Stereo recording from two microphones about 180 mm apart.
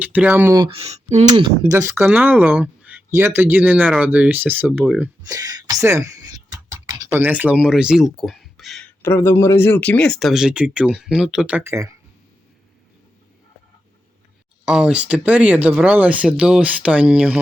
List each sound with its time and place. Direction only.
0.0 s speech: 10° right (ahead or behind)
0.6 s speech: 35° right (ahead or behind)
1.4 s speech: 25° right (ahead or behind)
4.9 s speech: 20° right (ahead or behind); by 8.9 s centre (ahead or behind)
9.0 s speech: 15° left (ahead or behind); by 11.9 s 15° right (ahead or behind)
14.6 s speech: 5° right (ahead or behind)